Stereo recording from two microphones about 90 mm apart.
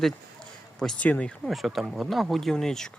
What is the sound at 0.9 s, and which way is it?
Speech, 15° left (ahead or behind).